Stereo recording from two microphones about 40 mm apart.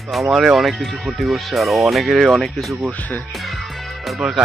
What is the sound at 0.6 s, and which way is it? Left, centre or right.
Speech, centre.